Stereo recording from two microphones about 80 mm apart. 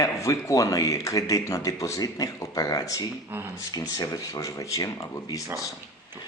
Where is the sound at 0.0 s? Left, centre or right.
Left.